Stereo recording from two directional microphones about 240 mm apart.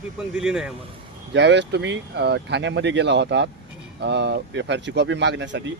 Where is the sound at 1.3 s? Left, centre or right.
Right.